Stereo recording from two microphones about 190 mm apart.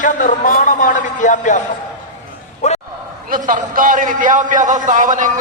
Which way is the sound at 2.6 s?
35° left (ahead or behind).